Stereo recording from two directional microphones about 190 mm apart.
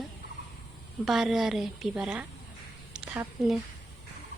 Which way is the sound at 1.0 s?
Centre (ahead or behind).